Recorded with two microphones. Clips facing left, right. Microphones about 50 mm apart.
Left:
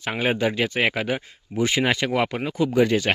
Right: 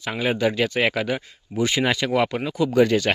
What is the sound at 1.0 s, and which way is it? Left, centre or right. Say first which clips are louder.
Speech: even; left.